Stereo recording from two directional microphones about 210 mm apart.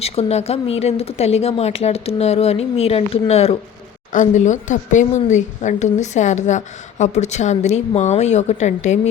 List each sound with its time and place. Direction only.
0.0 s a woman's voice: 30° left (ahead or behind)